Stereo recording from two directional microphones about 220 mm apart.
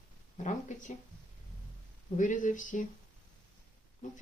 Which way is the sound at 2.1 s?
35° left (ahead or behind).